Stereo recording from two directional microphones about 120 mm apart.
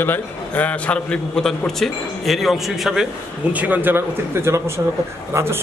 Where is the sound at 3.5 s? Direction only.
15° right (ahead or behind).